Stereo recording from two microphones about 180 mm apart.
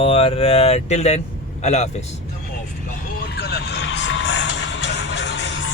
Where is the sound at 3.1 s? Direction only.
60° left (ahead or behind).